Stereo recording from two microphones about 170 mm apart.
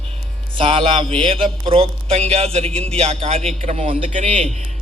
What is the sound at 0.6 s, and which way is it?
A man's voice, 30° right (ahead or behind).